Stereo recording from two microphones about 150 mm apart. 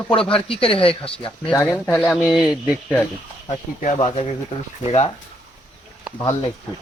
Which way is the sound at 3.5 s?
50° left (ahead or behind).